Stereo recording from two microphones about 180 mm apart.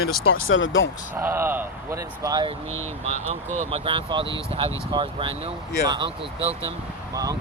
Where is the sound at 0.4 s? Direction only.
90° left.